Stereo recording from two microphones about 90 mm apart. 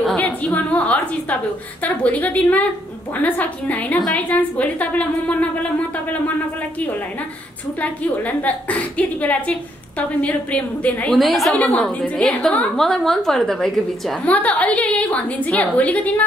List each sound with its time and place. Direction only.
0.1 s a woman's voice: 15° left (ahead or behind)
7.8 s a woman's voice: 15° left (ahead or behind)
11.1 s a woman's voice: centre (ahead or behind)
14.2 s a woman's voice: 15° left (ahead or behind)